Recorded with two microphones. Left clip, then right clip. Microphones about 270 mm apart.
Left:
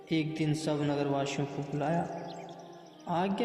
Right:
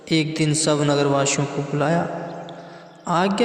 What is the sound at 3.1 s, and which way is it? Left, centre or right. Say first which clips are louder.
Speech: right 11 dB; right.